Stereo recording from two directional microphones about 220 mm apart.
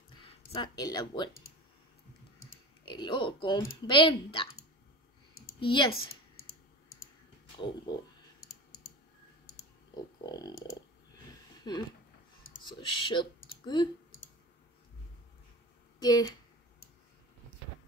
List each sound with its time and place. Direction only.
0.5 s speech: 20° left (ahead or behind)
2.8 s speech: 20° left (ahead or behind)
5.6 s speech: 20° left (ahead or behind)
7.6 s speech: 20° left (ahead or behind)
9.9 s a sound: 20° left (ahead or behind)
11.7 s speech: 20° left (ahead or behind)
16.0 s speech: 20° left (ahead or behind)